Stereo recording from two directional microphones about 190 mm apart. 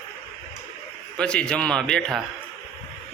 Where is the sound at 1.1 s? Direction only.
5° left (ahead or behind).